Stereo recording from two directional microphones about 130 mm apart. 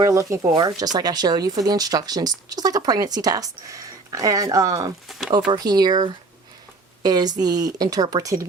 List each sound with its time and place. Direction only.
0.0 s speech: 25° right (ahead or behind)
5.0 s speech: centre (ahead or behind)
5.5 s speech: 30° right (ahead or behind)